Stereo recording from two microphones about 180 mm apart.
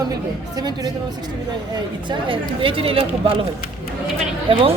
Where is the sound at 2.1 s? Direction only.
30° right (ahead or behind).